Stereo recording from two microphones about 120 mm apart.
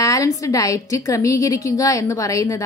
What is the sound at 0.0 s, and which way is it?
A woman's voice, 30° left (ahead or behind).